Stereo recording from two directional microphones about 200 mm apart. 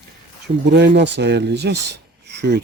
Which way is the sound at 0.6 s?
60° right (ahead or behind).